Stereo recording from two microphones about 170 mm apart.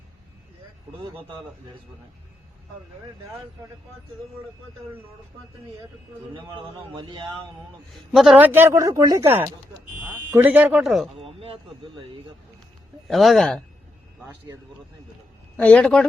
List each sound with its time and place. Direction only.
6.3 s speech: 25° right (ahead or behind)
7.9 s a man's voice: centre (ahead or behind)
8.5 s speech: 15° right (ahead or behind)
11.2 s speech: 35° right (ahead or behind)
13.1 s a man's voice: centre (ahead or behind)
15.5 s a man's voice: 5° left (ahead or behind)